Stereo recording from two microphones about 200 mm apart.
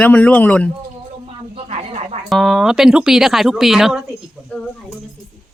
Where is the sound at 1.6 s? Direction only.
30° right (ahead or behind).